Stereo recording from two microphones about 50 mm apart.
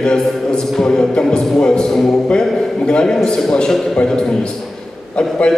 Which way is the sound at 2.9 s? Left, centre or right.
Centre.